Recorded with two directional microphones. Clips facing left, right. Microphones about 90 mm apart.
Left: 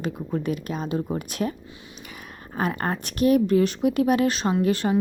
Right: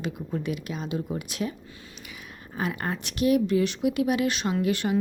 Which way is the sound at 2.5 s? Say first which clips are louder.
Left 4 dB; 45° left (ahead or behind).